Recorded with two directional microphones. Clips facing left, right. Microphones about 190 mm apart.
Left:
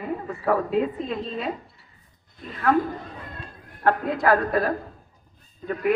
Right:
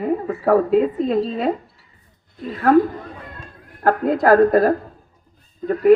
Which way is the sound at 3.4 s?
40° right (ahead or behind).